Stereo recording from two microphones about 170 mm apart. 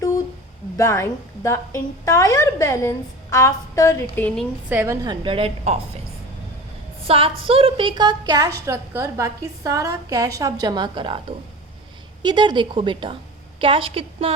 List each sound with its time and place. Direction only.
0.8 s a woman's voice: 15° left (ahead or behind)
4.7 s a woman's voice: 15° right (ahead or behind)
5.0 s a woman's voice: 30° right (ahead or behind)
7.0 s a woman's voice: 35° right (ahead or behind)